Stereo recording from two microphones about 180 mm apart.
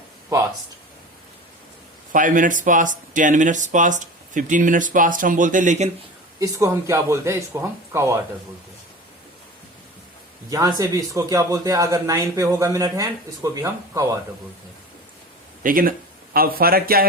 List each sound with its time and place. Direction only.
2.1 s speech: 45° right (ahead or behind)
6.4 s speech: 15° right (ahead or behind)
10.5 s speech: 20° right (ahead or behind)
15.6 s speech: 50° right (ahead or behind)